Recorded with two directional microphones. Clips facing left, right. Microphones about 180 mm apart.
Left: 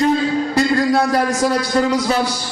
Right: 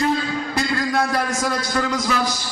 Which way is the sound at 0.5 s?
35° left (ahead or behind).